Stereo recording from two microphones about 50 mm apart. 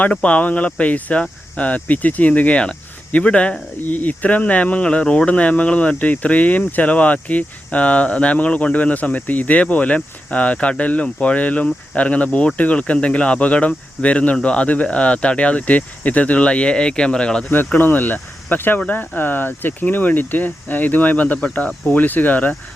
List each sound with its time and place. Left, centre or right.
0.0 s speech: left
17.7 s speech: left